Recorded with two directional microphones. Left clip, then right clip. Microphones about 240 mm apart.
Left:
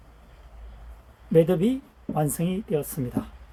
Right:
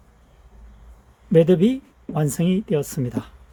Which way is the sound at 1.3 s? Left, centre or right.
Right.